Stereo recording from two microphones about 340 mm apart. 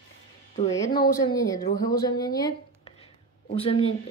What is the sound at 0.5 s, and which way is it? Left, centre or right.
Speech, centre.